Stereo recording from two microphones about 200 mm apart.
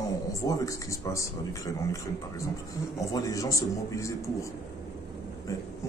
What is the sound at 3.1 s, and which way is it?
Speech, 15° left (ahead or behind).